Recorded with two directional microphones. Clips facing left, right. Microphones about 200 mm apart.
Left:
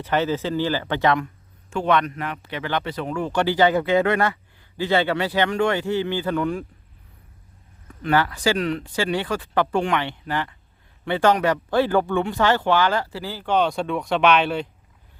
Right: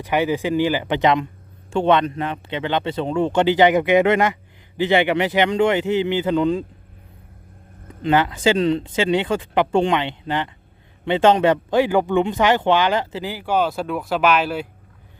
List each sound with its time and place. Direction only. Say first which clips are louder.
0.0 s speech: right 2 dB; 15° right (ahead or behind)
7.9 s speech: right 3 dB; 20° right (ahead or behind); by 14.7 s 5° right (ahead or behind)